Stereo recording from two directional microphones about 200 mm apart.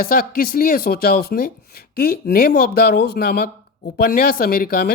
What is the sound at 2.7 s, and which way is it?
Speech, 50° left (ahead or behind).